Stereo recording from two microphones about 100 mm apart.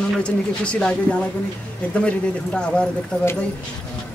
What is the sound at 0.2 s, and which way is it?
A man's voice, 10° left (ahead or behind).